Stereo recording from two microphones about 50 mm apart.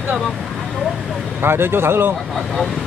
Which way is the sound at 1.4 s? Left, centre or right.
Right.